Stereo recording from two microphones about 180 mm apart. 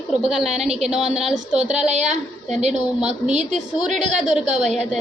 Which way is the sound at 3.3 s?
40° right (ahead or behind).